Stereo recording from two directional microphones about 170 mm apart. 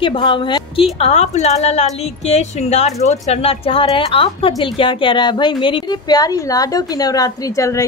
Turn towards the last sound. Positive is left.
turn(degrees=20)  # may be behind; listen again after turning